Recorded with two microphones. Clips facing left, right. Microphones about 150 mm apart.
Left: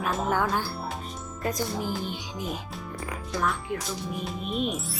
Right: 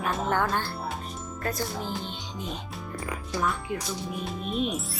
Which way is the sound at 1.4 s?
20° left (ahead or behind).